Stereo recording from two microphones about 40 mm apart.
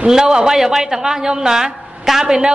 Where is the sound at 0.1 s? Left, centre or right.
Centre.